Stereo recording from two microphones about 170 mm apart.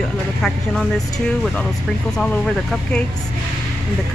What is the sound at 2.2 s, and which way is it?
Speech, 5° left (ahead or behind).